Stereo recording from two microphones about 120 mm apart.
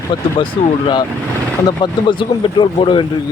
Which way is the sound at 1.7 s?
40° left (ahead or behind).